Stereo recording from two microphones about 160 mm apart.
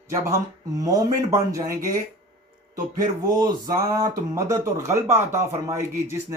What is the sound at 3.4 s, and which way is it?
Speech, 25° right (ahead or behind).